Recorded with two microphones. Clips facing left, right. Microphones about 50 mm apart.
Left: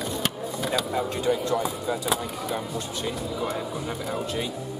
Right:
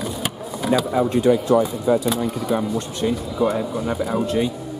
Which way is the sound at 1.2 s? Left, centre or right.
Centre.